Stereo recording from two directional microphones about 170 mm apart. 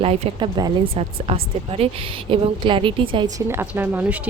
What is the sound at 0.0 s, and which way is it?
A woman's voice, 30° right (ahead or behind).